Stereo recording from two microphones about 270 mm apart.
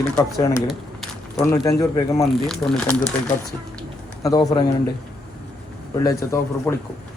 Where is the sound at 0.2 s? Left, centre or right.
Centre.